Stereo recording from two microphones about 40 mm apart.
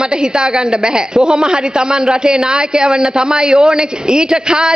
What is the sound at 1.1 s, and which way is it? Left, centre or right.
A man's voice, centre.